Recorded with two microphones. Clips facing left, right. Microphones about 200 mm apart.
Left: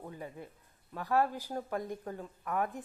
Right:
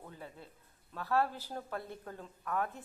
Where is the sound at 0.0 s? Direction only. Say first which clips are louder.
Left 5 dB; 15° left (ahead or behind).